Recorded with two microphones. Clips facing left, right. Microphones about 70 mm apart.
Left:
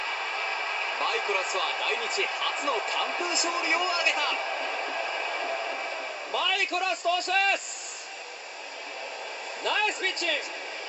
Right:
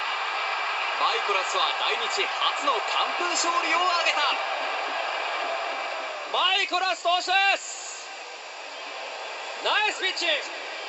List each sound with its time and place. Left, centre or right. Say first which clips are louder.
0.0 s speech: right 3 dB; right
9.6 s speech: right 2 dB; right